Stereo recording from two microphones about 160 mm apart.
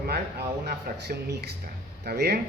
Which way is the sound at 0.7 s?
90° right.